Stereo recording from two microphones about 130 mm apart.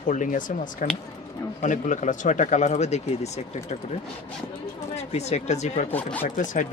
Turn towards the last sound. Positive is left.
turn(degrees=75)  # may be behind; listen again after turning